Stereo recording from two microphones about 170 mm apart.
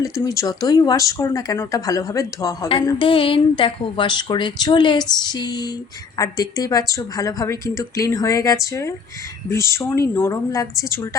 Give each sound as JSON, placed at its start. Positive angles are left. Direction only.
{"t": 0.0, "sound": "a woman's voice", "side_deg": 20}
{"t": 2.8, "sound": "a woman's voice", "side_deg": 30}